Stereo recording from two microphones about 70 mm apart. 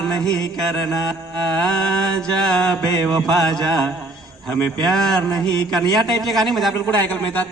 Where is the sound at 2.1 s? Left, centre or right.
Centre.